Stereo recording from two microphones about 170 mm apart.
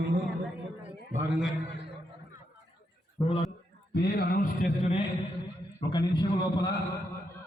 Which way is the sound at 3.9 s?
70° left (ahead or behind).